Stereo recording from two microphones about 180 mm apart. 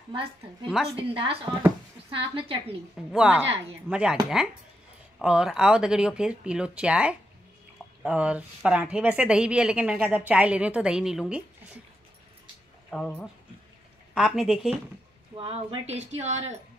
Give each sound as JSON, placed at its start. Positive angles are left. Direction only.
{"t": 0.1, "sound": "a woman's voice", "side_deg": -30}
{"t": 3.1, "sound": "speech", "side_deg": -5}
{"t": 5.2, "sound": "speech", "side_deg": -5}
{"t": 12.9, "sound": "speech", "side_deg": 5}
{"t": 15.3, "sound": "speech", "side_deg": -35}